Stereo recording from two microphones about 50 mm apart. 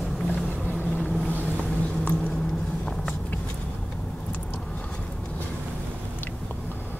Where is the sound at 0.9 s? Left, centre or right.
Centre.